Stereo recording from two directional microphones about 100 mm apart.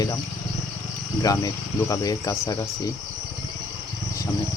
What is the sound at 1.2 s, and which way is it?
Speech, 35° left (ahead or behind).